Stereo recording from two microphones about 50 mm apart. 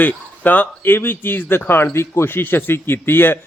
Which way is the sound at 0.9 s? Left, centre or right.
Left.